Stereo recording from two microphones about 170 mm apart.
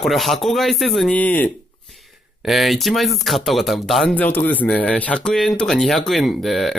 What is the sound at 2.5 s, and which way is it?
Speech, centre (ahead or behind).